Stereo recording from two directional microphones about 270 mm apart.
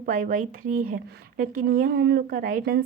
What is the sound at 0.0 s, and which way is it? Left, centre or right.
A woman's voice, right.